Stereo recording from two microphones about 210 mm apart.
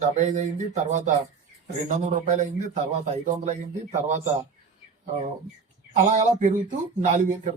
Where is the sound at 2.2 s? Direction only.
35° right (ahead or behind).